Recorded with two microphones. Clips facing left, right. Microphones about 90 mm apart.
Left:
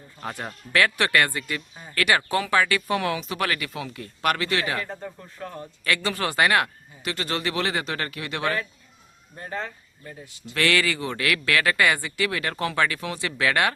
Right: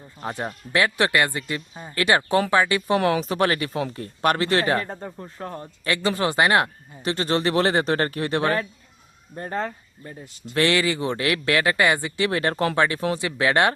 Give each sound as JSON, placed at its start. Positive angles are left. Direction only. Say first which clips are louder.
{"t": 0.2, "sound": "a man's voice", "louder": "right 4 dB", "side_deg": -20}
{"t": 3.0, "sound": "a man's voice", "louder": "right 6 dB", "side_deg": -40}
{"t": 5.8, "sound": "a man's voice", "louder": "right 3 dB", "side_deg": -25}
{"t": 10.0, "sound": "a man's voice", "louder": "right 2 dB", "side_deg": -25}